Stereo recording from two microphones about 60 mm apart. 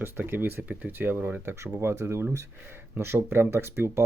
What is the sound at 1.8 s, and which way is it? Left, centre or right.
Speech, right.